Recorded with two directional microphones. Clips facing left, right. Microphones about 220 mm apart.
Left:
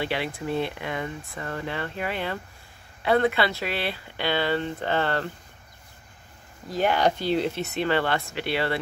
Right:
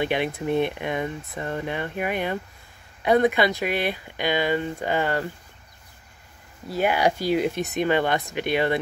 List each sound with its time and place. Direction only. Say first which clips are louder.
0.0 s speech: right 4 dB; 20° right (ahead or behind)
6.7 s speech: right 1 dB; 10° right (ahead or behind)